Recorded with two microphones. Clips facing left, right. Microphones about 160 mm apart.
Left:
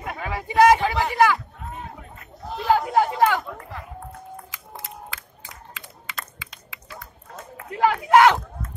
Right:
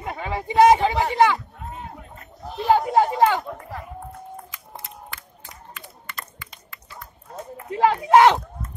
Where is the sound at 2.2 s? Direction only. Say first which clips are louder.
Right 2 dB; 25° right (ahead or behind).